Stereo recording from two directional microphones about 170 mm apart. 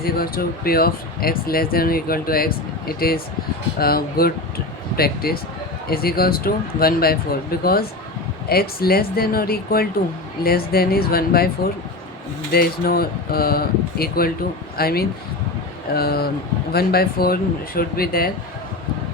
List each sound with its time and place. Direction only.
0.0 s speech: 60° left (ahead or behind)
12.5 s speech: 60° left (ahead or behind)